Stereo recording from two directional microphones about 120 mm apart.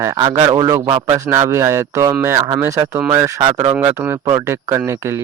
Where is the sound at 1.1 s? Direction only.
20° right (ahead or behind).